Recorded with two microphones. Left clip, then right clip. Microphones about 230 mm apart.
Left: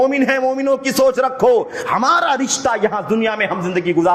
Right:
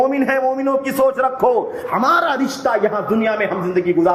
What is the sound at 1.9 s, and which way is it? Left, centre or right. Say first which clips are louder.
Speech: left 1 dB; left.